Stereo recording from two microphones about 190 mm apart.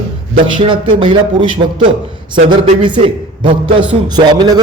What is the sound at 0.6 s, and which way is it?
A man's voice, 25° right (ahead or behind).